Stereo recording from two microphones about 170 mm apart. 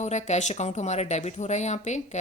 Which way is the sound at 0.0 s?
40° left (ahead or behind).